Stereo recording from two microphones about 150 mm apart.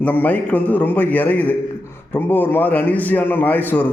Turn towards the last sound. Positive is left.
turn(degrees=15)  # may be behind; listen again after turning